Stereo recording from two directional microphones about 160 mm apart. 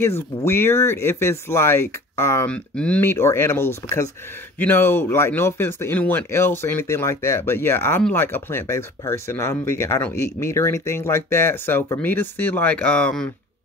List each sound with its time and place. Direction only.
0.0 s speech: 15° left (ahead or behind)